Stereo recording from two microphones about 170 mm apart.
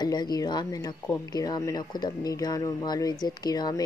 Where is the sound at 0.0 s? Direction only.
25° left (ahead or behind).